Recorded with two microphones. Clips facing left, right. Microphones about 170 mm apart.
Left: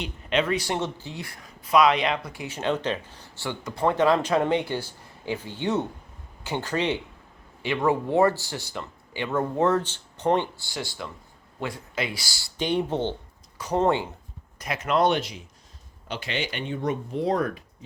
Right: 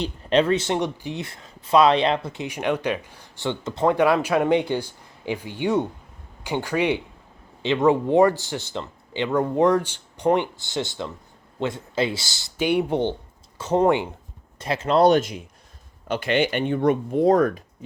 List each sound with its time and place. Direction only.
0.0 s speech: 35° right (ahead or behind)
12.5 s speech: 10° right (ahead or behind)
13.6 s speech: 25° right (ahead or behind)
14.6 s speech: 30° right (ahead or behind); by 17.6 s 45° right (ahead or behind)